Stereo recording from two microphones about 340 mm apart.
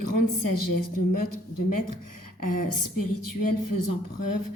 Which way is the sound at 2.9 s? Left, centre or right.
Left.